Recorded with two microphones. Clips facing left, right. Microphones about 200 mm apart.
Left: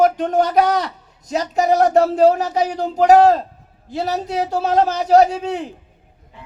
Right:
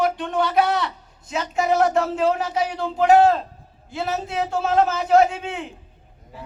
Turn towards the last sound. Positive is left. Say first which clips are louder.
# left 4 dB
turn(degrees=35)  # may be behind; listen again after turning